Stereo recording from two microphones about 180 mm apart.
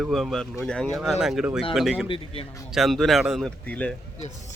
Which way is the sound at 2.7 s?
Centre (ahead or behind).